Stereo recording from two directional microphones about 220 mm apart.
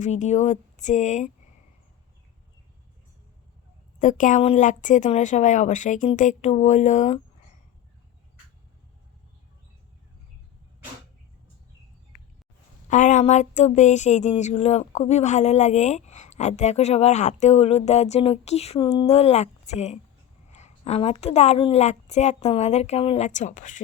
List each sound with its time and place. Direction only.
0.0 s speech: 30° left (ahead or behind)
4.0 s speech: 35° left (ahead or behind)
12.9 s a woman's voice: 35° left (ahead or behind)